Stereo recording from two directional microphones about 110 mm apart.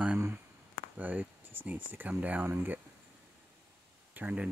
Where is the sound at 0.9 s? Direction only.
15° right (ahead or behind).